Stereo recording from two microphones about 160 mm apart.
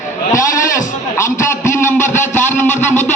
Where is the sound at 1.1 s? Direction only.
15° left (ahead or behind).